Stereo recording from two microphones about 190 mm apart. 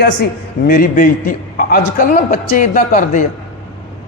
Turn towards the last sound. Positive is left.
turn(degrees=45)  # may be behind; listen again after turning